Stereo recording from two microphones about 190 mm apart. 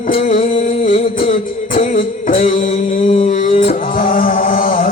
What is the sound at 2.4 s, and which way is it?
Mantra, 30° left (ahead or behind).